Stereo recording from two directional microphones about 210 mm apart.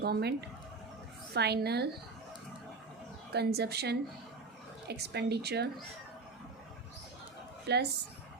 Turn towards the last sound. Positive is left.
turn(degrees=-55)  # may be behind; listen again after turning